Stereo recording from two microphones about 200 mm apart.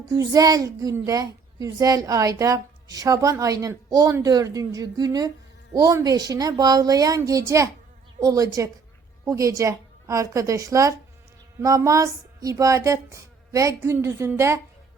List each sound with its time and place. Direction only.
0.1 s a woman's voice: 20° right (ahead or behind)